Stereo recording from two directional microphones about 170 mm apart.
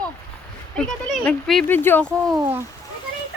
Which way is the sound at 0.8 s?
5° left (ahead or behind).